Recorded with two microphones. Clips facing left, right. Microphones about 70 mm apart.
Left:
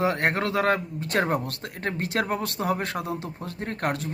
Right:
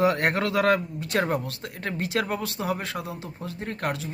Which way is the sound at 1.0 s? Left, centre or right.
Left.